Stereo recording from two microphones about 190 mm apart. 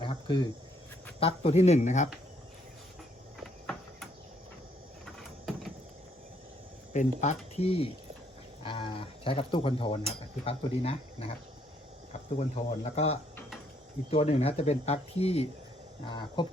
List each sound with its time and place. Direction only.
0.0 s a sound: 25° left (ahead or behind)
1.2 s speech: 30° left (ahead or behind)
6.9 s speech: 40° left (ahead or behind)